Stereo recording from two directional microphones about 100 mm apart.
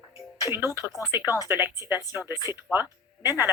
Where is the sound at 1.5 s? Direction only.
25° right (ahead or behind).